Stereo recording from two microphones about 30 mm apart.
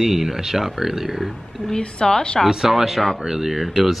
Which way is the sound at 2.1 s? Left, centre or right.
Left.